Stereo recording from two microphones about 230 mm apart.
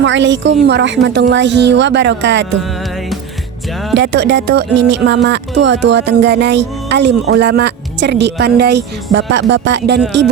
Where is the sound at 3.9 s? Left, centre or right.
Right.